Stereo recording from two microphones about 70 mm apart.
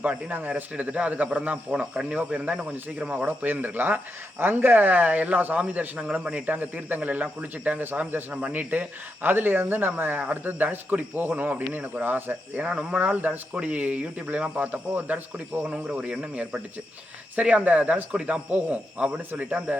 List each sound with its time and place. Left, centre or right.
0.0 s a man's voice: right